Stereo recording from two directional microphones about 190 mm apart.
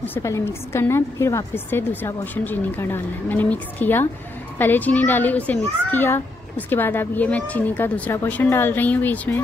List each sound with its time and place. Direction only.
0.0 s a woman's voice: 15° left (ahead or behind)